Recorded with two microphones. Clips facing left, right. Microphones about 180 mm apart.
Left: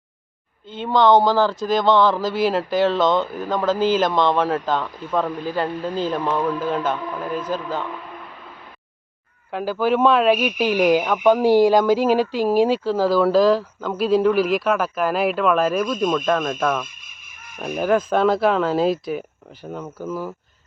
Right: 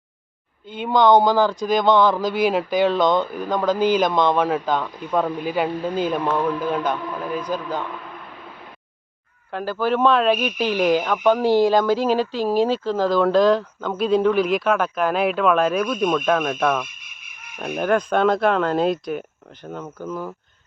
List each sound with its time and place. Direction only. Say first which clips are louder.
0.9 s a man's voice: even; centre (ahead or behind)
3.8 s speech: right 1 dB; 15° right (ahead or behind)
4.4 s a man's voice: even; centre (ahead or behind); by 6.2 s 15° right (ahead or behind)
6.6 s a man's voice: even; centre (ahead or behind)
9.5 s a man's voice: left 2 dB; 10° left (ahead or behind)